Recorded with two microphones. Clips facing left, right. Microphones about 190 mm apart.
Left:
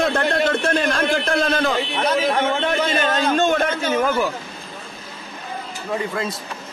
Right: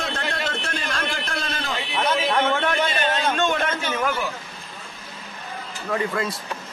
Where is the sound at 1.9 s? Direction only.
40° left (ahead or behind).